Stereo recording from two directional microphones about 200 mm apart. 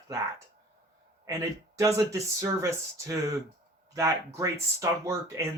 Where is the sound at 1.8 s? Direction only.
15° right (ahead or behind).